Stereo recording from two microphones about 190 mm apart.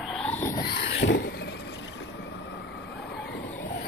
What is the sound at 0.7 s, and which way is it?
Vehicle, 65° left (ahead or behind).